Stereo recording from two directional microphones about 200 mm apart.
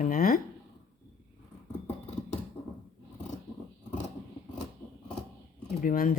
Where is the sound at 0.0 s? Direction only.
45° left (ahead or behind).